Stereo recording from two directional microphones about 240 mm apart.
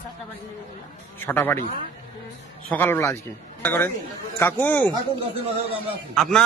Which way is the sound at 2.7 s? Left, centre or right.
Centre.